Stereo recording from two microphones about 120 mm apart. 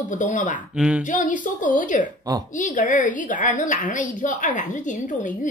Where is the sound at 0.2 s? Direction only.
90° left.